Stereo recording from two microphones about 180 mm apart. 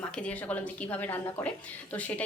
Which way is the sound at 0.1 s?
5° left (ahead or behind).